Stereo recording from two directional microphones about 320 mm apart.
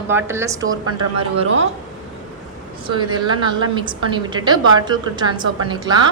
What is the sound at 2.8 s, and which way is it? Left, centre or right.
A woman's voice, centre.